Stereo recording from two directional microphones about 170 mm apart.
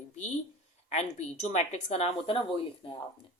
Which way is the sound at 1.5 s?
40° left (ahead or behind).